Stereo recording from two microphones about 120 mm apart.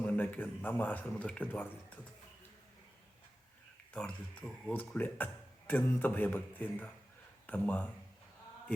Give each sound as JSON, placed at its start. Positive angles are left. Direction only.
{"t": 0.0, "sound": "a man's voice", "side_deg": 15}
{"t": 3.9, "sound": "a man's voice", "side_deg": 10}